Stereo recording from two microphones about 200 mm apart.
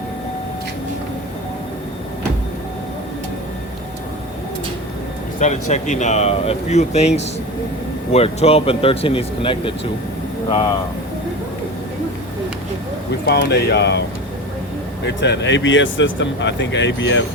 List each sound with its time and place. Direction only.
5.4 s speech: 35° left (ahead or behind)
13.2 s speech: 55° left (ahead or behind)
15.0 s speech: 60° left (ahead or behind)